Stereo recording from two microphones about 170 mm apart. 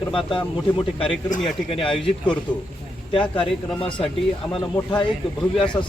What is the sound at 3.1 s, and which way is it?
Speech, 30° left (ahead or behind).